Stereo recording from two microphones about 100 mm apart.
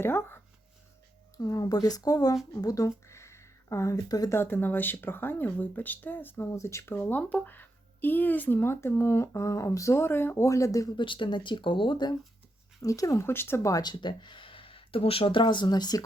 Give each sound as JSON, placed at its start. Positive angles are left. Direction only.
{"t": 0.0, "sound": "speech", "side_deg": 20}
{"t": 1.4, "sound": "speech", "side_deg": 35}
{"t": 4.4, "sound": "speech", "side_deg": 20}
{"t": 10.9, "sound": "speech", "side_deg": 55}
{"t": 12.8, "sound": "speech", "side_deg": 35}
{"t": 13.8, "sound": "speech", "side_deg": 50}